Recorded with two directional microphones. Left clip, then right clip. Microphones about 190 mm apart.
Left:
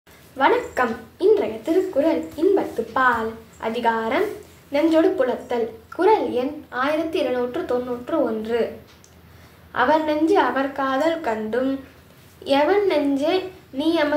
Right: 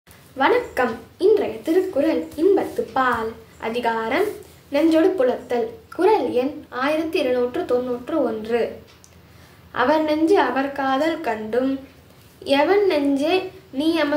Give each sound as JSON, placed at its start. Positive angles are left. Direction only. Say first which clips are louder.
{"t": 0.4, "sound": "a woman's voice", "louder": "even", "side_deg": -5}
{"t": 9.7, "sound": "a woman's voice", "louder": "even", "side_deg": -5}